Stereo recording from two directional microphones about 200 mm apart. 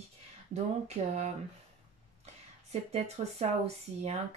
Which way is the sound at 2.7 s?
30° right (ahead or behind).